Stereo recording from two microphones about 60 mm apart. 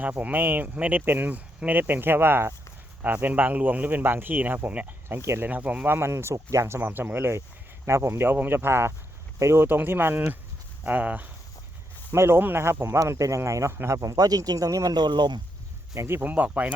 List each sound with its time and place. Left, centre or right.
0.0 s speech: right
5.0 s speech: right
5.5 s speech: right
5.9 s speech: right
6.3 s speech: right
6.7 s speech: right
8.3 s speech: right
9.6 s speech: right
10.8 s speech: right
12.1 s speech: right
13.0 s speech: right
13.8 s speech: right
16.0 s speech: right
16.3 s speech: right